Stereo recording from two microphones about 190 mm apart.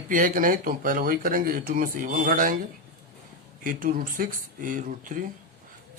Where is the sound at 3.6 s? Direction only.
45° right (ahead or behind).